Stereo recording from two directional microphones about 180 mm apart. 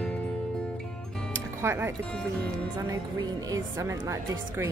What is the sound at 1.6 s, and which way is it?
Speech, 15° right (ahead or behind).